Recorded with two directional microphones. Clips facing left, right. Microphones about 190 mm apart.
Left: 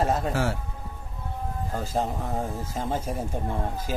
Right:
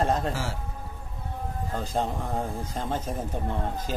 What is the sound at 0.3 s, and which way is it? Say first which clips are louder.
Speech: left 5 dB; 60° left (ahead or behind).